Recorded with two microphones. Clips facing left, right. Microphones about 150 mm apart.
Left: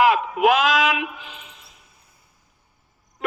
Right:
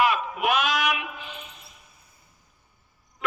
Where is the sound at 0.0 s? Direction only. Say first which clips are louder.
Left 6 dB; 90° left.